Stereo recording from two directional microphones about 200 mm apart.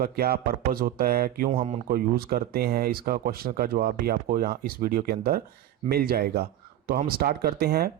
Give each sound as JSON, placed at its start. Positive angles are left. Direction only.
{"t": 0.0, "sound": "speech", "side_deg": -50}